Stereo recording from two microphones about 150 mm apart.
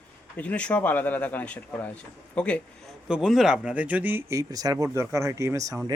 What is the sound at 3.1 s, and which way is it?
Speech, 5° right (ahead or behind).